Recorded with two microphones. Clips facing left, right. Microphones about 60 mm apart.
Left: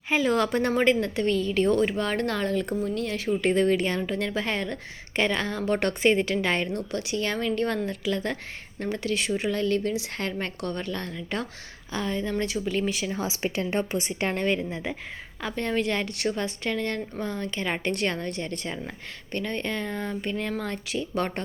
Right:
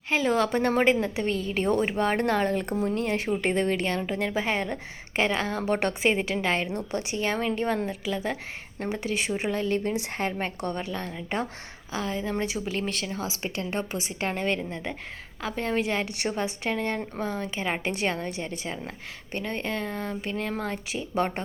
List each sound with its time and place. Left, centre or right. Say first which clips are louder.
0.1 s a woman's voice: left 1 dB; centre
0.9 s a woman's voice: left 2 dB; centre; by 3.2 s right
3.2 s a woman's voice: left 6 dB; centre
6.7 s a woman's voice: left 1 dB; right
7.9 s a woman's voice: left 1 dB; centre
11.3 s a woman's voice: right 2 dB; right
11.9 s speech: left 1 dB; centre
12.3 s a woman's voice: left 1 dB; centre
12.5 s speech: left 3 dB; centre
13.1 s speech: left 3 dB; left
14.2 s speech: left 1 dB; centre
15.4 s a woman's voice: even; centre
16.1 s a woman's voice: left 2 dB; right
16.4 s a woman's voice: even; centre